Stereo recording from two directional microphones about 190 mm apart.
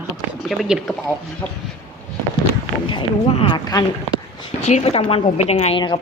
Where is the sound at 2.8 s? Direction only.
30° left (ahead or behind).